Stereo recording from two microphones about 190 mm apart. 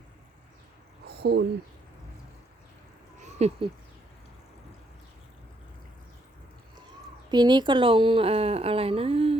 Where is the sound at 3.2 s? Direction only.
35° right (ahead or behind).